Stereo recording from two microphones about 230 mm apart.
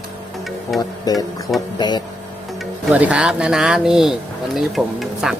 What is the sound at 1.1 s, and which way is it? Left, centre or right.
Music, centre.